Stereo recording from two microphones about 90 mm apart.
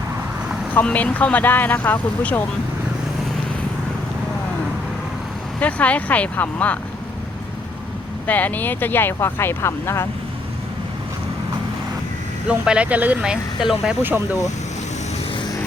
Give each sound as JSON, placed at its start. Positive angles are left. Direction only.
{"t": 0.7, "sound": "speech", "side_deg": 20}
{"t": 5.5, "sound": "speech", "side_deg": 15}
{"t": 8.3, "sound": "speech", "side_deg": 20}
{"t": 12.5, "sound": "speech", "side_deg": -10}